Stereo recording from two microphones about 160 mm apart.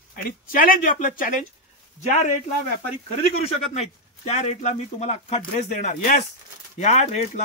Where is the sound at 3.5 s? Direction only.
40° left (ahead or behind).